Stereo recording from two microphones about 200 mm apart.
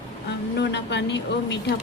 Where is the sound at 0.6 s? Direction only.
60° left (ahead or behind).